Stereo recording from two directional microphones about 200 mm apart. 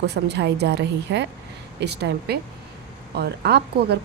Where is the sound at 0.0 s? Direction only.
55° right (ahead or behind).